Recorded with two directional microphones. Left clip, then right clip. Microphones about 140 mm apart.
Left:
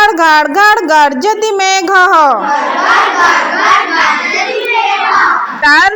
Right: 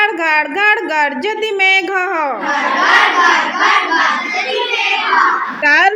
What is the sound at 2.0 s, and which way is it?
Speech, 30° left (ahead or behind).